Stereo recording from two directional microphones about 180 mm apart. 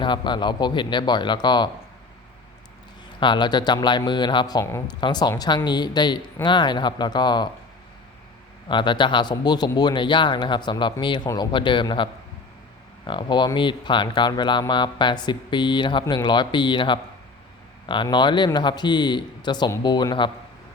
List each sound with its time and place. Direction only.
0.0 s speech: 25° left (ahead or behind)
3.2 s speech: 25° left (ahead or behind)
8.7 s speech: 25° left (ahead or behind)
13.1 s speech: 25° left (ahead or behind)